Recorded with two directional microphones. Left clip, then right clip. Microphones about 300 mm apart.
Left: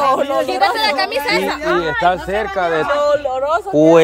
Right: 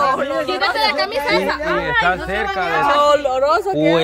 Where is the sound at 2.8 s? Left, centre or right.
Right.